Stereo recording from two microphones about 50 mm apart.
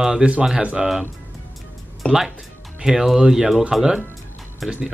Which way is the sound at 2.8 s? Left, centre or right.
Centre.